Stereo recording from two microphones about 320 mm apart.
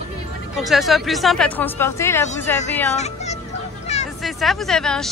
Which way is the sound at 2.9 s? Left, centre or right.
Left.